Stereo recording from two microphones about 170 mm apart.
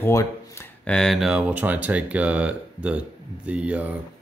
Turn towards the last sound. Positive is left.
turn(degrees=-10)  # may be behind; listen again after turning